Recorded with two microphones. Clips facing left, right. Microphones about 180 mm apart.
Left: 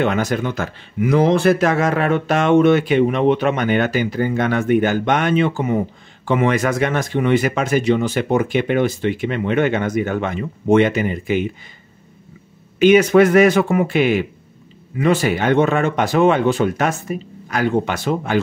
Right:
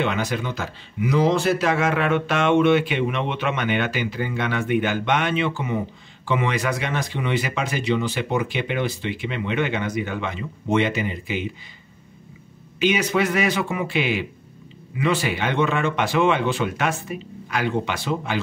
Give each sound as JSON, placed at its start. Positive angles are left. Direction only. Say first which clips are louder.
{"t": 0.0, "sound": "speech", "louder": "left 5 dB", "side_deg": 45}
{"t": 12.7, "sound": "speech", "louder": "left 10 dB", "side_deg": 50}